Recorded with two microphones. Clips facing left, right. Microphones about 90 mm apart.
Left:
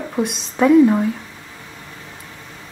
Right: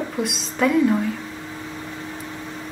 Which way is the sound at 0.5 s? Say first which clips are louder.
Left 6 dB; 20° left (ahead or behind).